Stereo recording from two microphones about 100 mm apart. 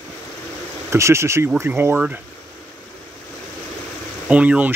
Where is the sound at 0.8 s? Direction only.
30° right (ahead or behind).